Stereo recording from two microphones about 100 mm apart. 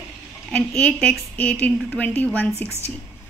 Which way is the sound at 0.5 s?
10° left (ahead or behind).